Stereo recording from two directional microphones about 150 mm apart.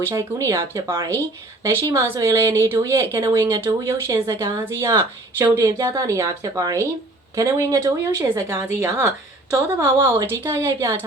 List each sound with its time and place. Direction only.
0.1 s a woman's voice: 20° right (ahead or behind)